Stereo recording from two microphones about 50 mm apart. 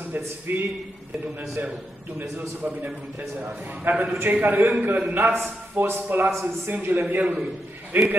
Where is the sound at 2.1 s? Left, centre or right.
Right.